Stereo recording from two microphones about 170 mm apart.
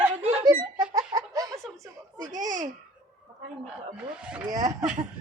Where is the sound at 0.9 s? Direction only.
20° right (ahead or behind).